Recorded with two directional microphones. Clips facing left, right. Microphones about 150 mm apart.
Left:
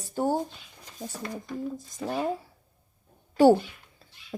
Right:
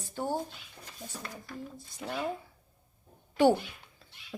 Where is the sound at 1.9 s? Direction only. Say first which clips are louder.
Left 4 dB; 40° left (ahead or behind).